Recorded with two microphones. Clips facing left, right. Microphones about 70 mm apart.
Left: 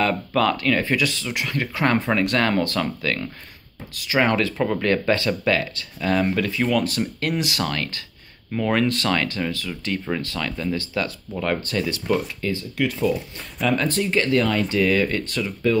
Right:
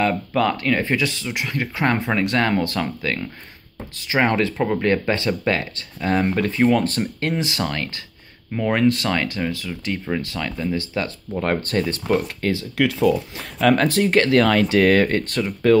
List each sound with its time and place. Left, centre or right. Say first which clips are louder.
0.0 s speech: right 1 dB; centre
4.2 s speech: right 1 dB; right
7.0 s speech: right 1 dB; right
11.3 s speech: right 3 dB; right
12.4 s speech: right 3 dB; right
13.6 s speech: right 5 dB; right